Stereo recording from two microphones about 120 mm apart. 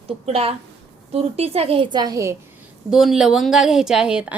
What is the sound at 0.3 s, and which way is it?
A woman's voice, 55° right (ahead or behind).